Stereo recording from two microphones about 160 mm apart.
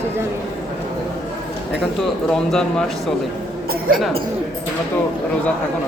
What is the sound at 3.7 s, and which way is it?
Speech, 60° right (ahead or behind).